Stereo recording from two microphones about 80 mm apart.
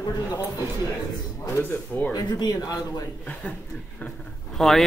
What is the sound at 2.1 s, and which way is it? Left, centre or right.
Speech, left.